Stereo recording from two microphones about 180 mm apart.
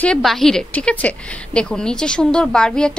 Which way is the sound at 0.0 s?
5° left (ahead or behind).